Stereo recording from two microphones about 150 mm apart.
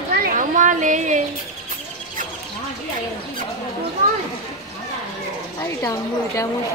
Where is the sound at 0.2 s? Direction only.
60° right (ahead or behind).